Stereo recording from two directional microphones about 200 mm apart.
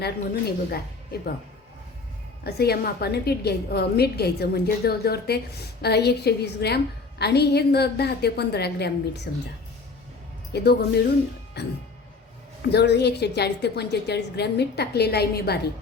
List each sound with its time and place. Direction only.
0.0 s a woman's voice: 50° left (ahead or behind)
2.4 s a woman's voice: 50° left (ahead or behind)
10.5 s a woman's voice: 55° left (ahead or behind)
12.7 s a woman's voice: 55° left (ahead or behind)